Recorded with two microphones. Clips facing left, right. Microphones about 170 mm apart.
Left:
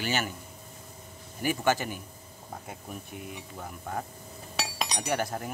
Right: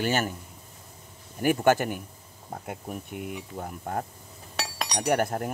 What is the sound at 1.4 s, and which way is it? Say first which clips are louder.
Speech: right 5 dB; 55° right (ahead or behind).